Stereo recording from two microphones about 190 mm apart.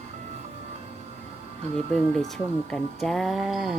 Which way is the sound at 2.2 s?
Centre (ahead or behind).